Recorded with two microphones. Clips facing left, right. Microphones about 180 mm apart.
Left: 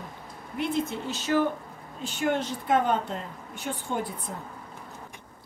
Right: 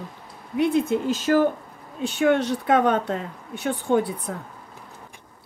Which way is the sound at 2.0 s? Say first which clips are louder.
Right 7 dB; 70° right (ahead or behind).